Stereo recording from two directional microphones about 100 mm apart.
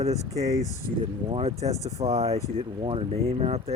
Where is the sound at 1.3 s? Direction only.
90° right.